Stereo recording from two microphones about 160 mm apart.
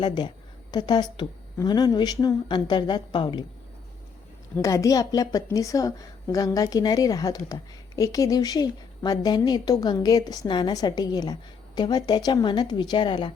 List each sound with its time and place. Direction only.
0.0 s a woman's voice: 30° left (ahead or behind)
4.5 s a woman's voice: 20° left (ahead or behind)